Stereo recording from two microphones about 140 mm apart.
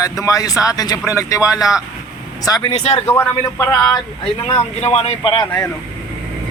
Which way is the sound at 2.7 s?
50° left (ahead or behind).